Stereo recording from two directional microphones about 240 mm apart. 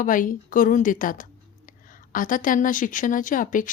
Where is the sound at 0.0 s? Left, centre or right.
Left.